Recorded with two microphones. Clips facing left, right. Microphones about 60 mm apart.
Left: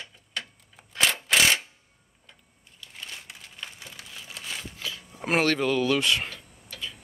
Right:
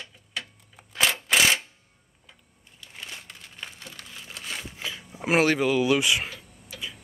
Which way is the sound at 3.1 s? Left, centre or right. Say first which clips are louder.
Even; centre.